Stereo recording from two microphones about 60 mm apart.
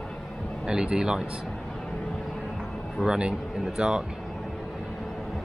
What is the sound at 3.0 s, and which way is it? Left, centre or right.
Speech, centre.